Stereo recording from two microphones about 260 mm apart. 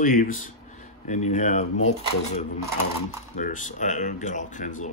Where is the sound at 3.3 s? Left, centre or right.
Left.